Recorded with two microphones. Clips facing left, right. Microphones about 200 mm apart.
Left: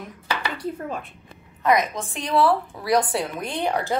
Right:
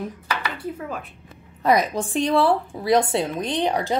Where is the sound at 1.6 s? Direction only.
35° right (ahead or behind); by 4.0 s 15° right (ahead or behind).